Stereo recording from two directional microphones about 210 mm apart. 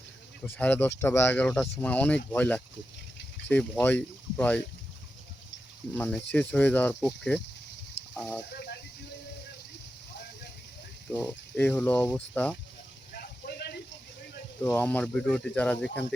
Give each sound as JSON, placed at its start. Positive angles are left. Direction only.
{"t": 0.4, "sound": "speech", "side_deg": 10}
{"t": 5.9, "sound": "speech", "side_deg": 5}
{"t": 8.5, "sound": "snake", "side_deg": 50}
{"t": 11.1, "sound": "speech", "side_deg": 5}
{"t": 13.1, "sound": "a sound", "side_deg": 50}
{"t": 14.6, "sound": "speech", "side_deg": 5}